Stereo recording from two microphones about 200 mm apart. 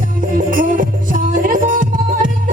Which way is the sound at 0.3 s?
45° right (ahead or behind).